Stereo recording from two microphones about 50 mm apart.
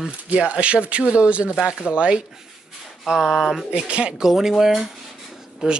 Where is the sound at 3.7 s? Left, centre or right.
Right.